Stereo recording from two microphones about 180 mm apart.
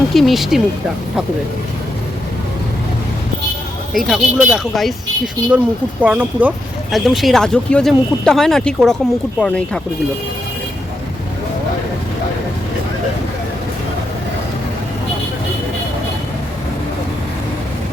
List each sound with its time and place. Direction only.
0.1 s speech: centre (ahead or behind)
3.9 s speech: 5° right (ahead or behind)